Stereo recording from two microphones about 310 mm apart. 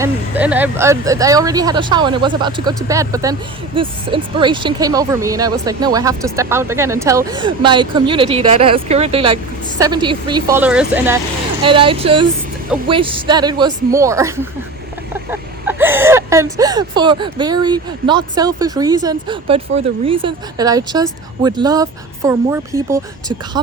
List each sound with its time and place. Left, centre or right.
0.0 s speech: centre